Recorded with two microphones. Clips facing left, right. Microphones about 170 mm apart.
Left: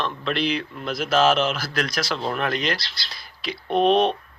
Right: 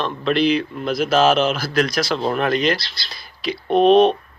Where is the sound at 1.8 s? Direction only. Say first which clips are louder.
Right 5 dB; 25° right (ahead or behind).